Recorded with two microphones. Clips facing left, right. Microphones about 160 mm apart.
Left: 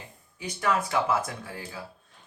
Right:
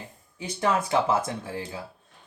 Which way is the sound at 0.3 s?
25° right (ahead or behind).